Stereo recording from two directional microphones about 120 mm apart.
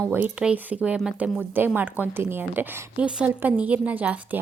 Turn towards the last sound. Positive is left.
turn(degrees=-15)  # may be behind; listen again after turning